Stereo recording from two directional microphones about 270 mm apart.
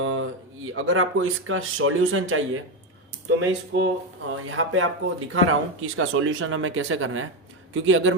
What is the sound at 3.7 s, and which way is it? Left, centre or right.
Speech, right.